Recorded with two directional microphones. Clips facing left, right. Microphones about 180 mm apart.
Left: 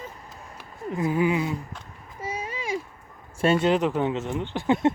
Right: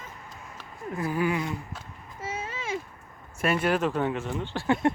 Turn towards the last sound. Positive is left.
turn(degrees=20)  # may be behind; listen again after turning